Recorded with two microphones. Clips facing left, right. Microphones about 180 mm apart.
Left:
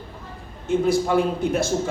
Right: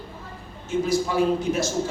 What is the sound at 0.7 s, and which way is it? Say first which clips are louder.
A man's voice: left 4 dB; 55° left (ahead or behind).